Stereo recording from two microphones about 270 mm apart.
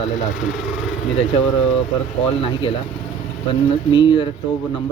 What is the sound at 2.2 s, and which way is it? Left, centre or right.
Speech, centre.